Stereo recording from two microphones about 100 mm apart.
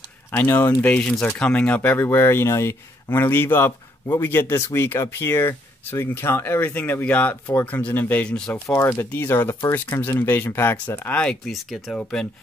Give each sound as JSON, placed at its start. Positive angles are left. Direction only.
{"t": 0.3, "sound": "speech", "side_deg": 20}
{"t": 8.7, "sound": "speech", "side_deg": 25}
{"t": 11.1, "sound": "speech", "side_deg": 5}